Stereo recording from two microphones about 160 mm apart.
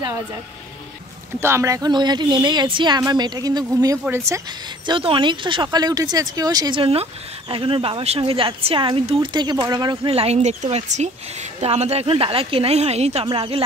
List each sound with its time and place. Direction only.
1.4 s speech: 15° right (ahead or behind)
4.8 s speech: 30° right (ahead or behind)